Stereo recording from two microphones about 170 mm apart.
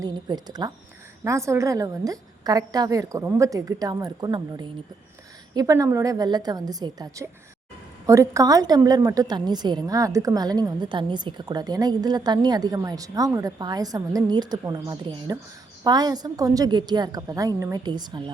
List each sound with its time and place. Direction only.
0.0 s a woman's voice: 25° right (ahead or behind)